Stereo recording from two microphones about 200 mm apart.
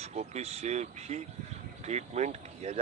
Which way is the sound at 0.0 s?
35° right (ahead or behind).